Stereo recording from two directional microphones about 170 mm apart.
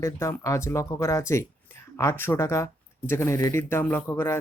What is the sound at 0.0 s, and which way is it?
Speech, 20° left (ahead or behind).